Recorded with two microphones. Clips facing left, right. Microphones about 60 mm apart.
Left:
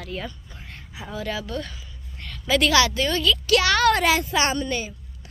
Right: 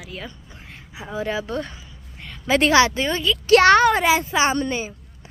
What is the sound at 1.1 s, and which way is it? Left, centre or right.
A woman's voice, right.